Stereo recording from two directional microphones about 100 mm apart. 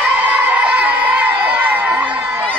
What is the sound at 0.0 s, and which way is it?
Crowd, 15° right (ahead or behind).